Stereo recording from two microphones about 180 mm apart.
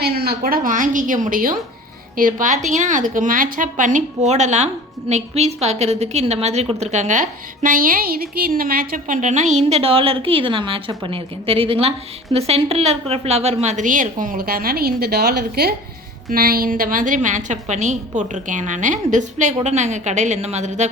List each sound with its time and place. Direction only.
0.0 s a woman's voice: 60° right (ahead or behind); by 20.9 s 40° right (ahead or behind)